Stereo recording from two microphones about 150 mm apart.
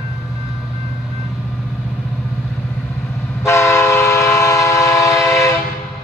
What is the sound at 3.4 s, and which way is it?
Train, 20° left (ahead or behind).